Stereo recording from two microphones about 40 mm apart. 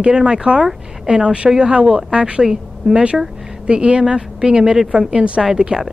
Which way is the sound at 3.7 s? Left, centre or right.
Right.